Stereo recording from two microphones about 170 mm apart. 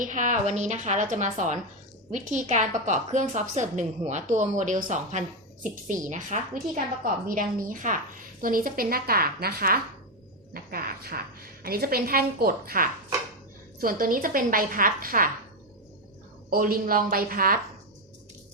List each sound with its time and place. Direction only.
0.0 s a woman's voice: 50° right (ahead or behind)
16.5 s a woman's voice: 60° right (ahead or behind)